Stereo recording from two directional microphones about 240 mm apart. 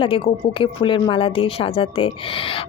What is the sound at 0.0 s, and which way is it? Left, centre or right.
Speech, left.